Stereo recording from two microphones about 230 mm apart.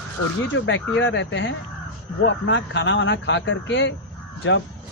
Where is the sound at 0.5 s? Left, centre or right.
Left.